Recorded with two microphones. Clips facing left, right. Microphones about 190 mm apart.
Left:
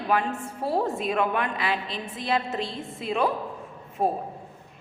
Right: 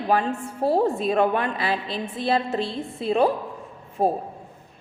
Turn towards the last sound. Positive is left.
turn(degrees=-35)  # may be behind; listen again after turning